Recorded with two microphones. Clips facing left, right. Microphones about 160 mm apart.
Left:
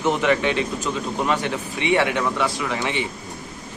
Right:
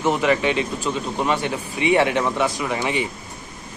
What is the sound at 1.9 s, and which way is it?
Speech, 25° right (ahead or behind).